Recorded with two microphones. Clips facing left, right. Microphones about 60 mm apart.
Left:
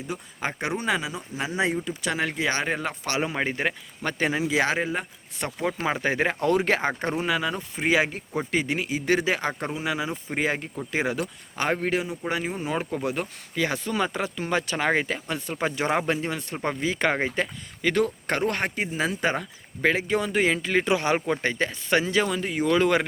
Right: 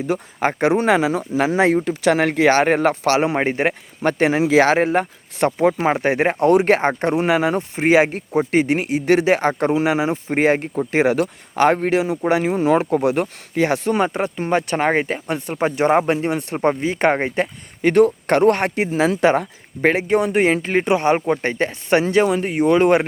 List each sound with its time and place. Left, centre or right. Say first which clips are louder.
0.1 s speech: right 10 dB; right
1.7 s speech: right 11 dB; right
3.4 s speech: right 7 dB; right
4.9 s speech: right 11 dB; right
5.7 s speech: right 7 dB; right
6.7 s speech: right 8 dB; right
10.9 s speech: right 9 dB; right
11.9 s speech: right 9 dB; right
15.6 s speech: right 8 dB; right
19.4 s speech: right 6 dB; right
20.6 s speech: right 5 dB; right